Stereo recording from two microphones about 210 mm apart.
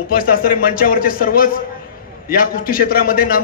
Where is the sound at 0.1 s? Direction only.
45° left (ahead or behind).